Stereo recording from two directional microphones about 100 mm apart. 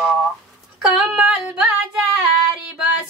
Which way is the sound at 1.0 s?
5° right (ahead or behind).